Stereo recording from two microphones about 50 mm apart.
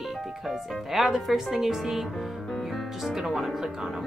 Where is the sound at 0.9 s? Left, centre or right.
Centre.